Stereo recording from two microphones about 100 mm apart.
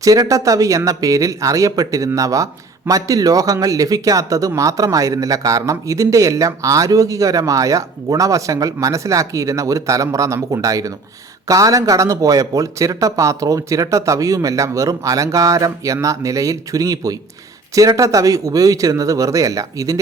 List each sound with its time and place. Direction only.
0.0 s speech: 35° right (ahead or behind)